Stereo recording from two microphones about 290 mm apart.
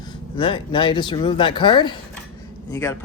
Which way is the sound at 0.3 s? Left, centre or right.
Centre.